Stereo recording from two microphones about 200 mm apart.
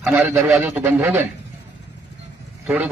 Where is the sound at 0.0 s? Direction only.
10° right (ahead or behind).